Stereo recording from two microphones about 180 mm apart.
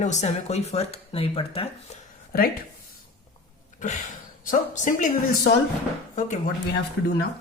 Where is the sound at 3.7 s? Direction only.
45° left (ahead or behind).